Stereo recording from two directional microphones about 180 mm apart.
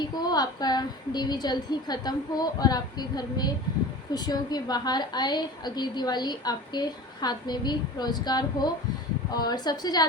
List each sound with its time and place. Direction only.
0.0 s a woman's voice: 20° left (ahead or behind)